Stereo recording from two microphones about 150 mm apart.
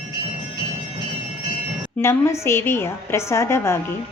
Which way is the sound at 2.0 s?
15° left (ahead or behind).